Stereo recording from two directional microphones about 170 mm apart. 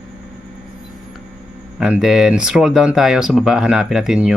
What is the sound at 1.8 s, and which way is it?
Speech, 5° right (ahead or behind).